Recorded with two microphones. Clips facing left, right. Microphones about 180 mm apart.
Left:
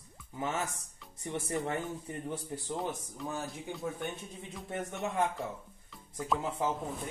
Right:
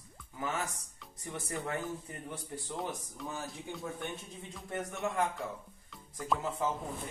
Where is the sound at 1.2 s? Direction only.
25° left (ahead or behind).